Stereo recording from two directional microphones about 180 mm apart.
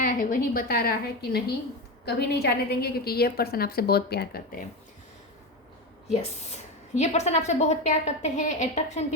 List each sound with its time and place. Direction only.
0.0 s a woman's voice: 50° left (ahead or behind)
6.5 s speech: 40° left (ahead or behind)